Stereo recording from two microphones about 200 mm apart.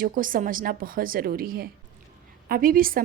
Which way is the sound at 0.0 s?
40° right (ahead or behind).